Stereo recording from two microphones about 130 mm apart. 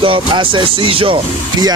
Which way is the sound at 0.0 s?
40° right (ahead or behind).